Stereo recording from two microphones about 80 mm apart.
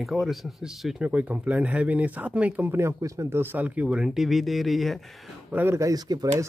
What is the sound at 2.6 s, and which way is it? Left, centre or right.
Speech, right.